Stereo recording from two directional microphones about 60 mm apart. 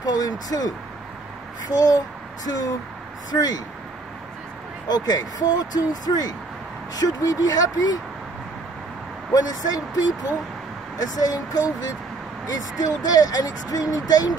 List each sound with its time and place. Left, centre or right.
0.0 s vehicle: left
1.7 s speech: left
4.9 s speech: left
9.3 s speech: left